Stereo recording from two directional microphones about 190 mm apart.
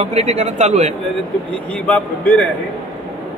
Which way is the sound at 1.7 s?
5° left (ahead or behind).